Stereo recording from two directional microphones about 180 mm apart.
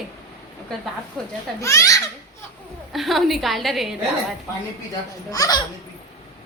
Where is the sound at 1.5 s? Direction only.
15° left (ahead or behind).